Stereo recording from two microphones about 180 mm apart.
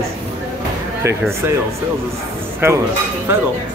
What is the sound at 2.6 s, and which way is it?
Speech, 15° right (ahead or behind).